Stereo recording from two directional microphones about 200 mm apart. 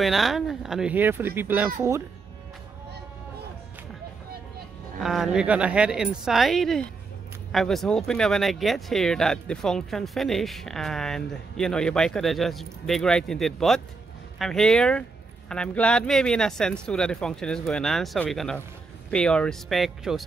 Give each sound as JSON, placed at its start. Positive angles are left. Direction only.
{"t": 0.0, "sound": "speech", "side_deg": 0}
{"t": 5.0, "sound": "speech", "side_deg": 0}